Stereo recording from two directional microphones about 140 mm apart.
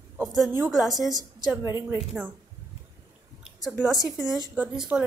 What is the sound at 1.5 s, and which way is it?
Speech, 20° right (ahead or behind).